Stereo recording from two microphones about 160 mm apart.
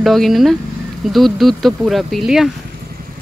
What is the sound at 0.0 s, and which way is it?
Speech, centre (ahead or behind).